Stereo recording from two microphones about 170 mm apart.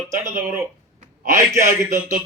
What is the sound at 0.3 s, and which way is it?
Speech, 15° right (ahead or behind).